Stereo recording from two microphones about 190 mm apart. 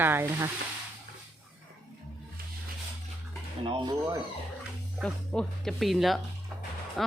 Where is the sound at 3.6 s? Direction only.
25° right (ahead or behind).